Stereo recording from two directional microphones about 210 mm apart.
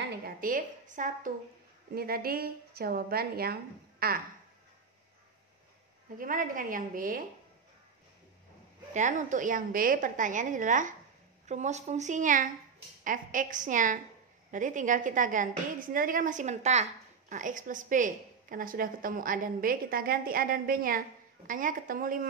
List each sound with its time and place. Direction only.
0.2 s a woman's voice: 40° right (ahead or behind)
6.1 s a woman's voice: 40° right (ahead or behind)
8.9 s a woman's voice: 35° right (ahead or behind)